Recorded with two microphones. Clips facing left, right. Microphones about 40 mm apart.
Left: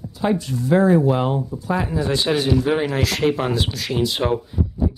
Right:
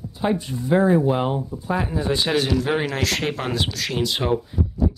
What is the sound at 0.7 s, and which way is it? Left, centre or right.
Speech, left.